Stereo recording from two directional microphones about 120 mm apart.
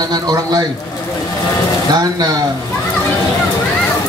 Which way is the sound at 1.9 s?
35° right (ahead or behind).